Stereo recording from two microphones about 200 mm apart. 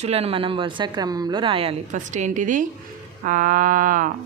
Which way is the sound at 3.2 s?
40° right (ahead or behind).